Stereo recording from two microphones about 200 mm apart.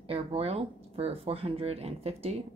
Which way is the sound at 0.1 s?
30° right (ahead or behind).